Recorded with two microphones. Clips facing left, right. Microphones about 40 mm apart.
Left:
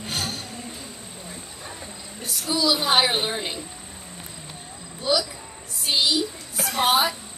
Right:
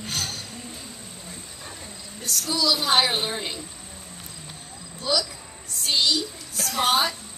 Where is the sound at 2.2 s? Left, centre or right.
Centre.